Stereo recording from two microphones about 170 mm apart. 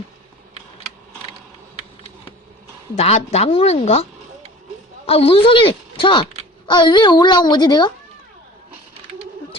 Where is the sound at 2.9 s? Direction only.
40° left (ahead or behind).